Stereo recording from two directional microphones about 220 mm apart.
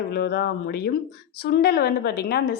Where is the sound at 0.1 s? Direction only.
45° left (ahead or behind).